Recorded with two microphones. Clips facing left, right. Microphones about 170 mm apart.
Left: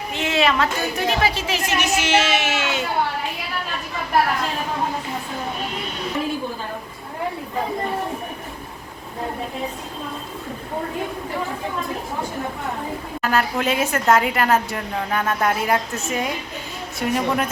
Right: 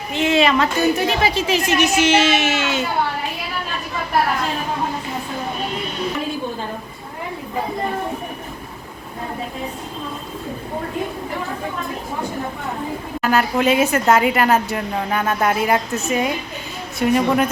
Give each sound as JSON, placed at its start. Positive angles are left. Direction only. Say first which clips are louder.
{"t": 0.2, "sound": "speech", "louder": "right 4 dB", "side_deg": 5}
{"t": 13.2, "sound": "speech", "louder": "right 4 dB", "side_deg": -5}